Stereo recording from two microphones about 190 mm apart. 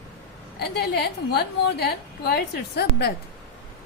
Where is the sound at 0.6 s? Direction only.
60° left (ahead or behind).